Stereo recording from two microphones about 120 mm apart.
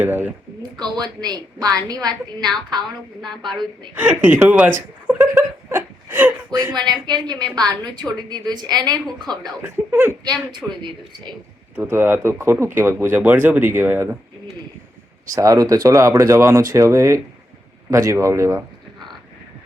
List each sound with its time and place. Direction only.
0.0 s speech: 15° right (ahead or behind)
0.8 s a woman's voice: 35° right (ahead or behind)
3.9 s speech: 15° right (ahead or behind)
6.7 s a woman's voice: 35° right (ahead or behind)
9.6 s speech: 20° right (ahead or behind)
10.6 s speech: 10° right (ahead or behind)
11.8 s speech: 20° right (ahead or behind)
15.3 s speech: 25° right (ahead or behind)